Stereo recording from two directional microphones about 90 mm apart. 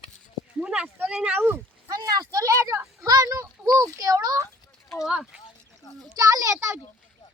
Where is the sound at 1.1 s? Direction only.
15° right (ahead or behind).